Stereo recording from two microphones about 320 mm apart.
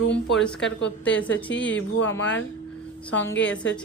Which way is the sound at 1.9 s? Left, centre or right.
Left.